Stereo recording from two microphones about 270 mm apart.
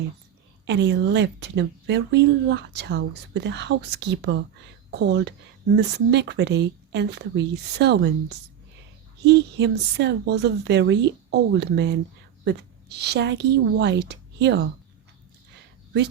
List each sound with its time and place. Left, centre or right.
0.7 s speech: right